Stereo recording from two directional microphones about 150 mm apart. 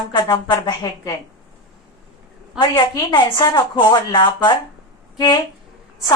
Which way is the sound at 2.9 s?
30° left (ahead or behind).